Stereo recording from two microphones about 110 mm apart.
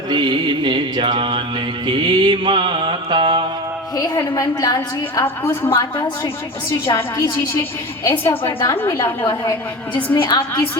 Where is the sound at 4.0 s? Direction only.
35° left (ahead or behind).